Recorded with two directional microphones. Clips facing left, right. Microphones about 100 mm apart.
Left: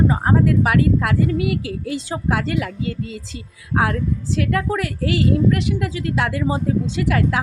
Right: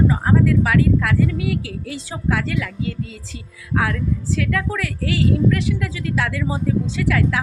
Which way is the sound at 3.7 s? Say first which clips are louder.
Left 1 dB; 35° left (ahead or behind).